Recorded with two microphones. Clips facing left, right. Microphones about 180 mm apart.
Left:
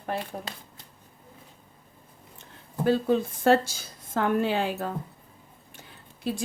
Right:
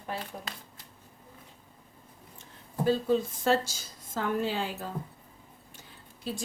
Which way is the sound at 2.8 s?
60° left (ahead or behind).